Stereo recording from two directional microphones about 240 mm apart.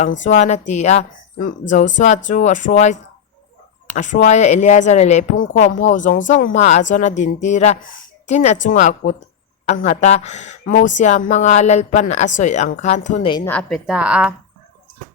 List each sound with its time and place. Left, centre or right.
0.3 s speech: left
13.3 s a woman's voice: centre